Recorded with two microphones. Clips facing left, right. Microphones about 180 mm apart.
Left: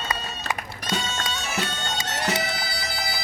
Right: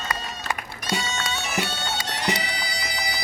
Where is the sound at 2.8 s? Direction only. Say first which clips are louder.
Even; 15° right (ahead or behind).